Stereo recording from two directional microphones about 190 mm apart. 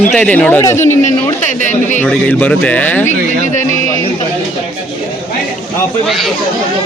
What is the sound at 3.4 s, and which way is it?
Speech, 40° left (ahead or behind).